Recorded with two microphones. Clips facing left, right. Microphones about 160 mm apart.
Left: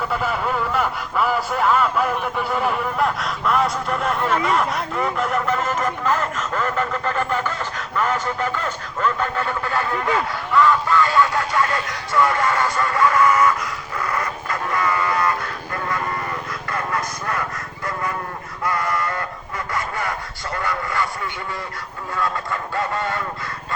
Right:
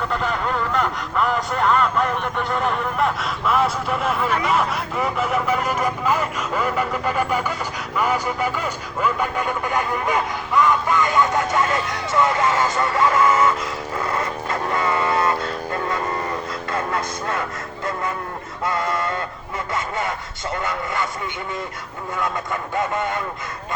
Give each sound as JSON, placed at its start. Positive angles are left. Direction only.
{"t": 0.1, "sound": "speech", "side_deg": 5}
{"t": 11.5, "sound": "vehicle", "side_deg": -20}
{"t": 18.6, "sound": "speech", "side_deg": -25}
{"t": 19.7, "sound": "a sound", "side_deg": -25}
{"t": 20.6, "sound": "speech", "side_deg": -20}
{"t": 22.7, "sound": "speech", "side_deg": -20}